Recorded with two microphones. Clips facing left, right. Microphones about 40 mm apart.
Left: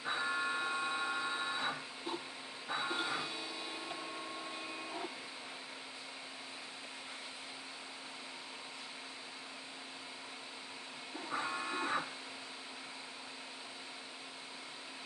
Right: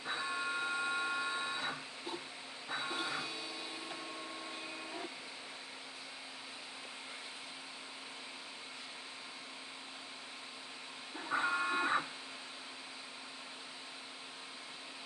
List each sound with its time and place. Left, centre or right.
0.0 s printer: centre
11.2 s printer: centre